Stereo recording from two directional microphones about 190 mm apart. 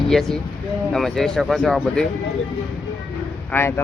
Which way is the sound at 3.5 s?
10° left (ahead or behind).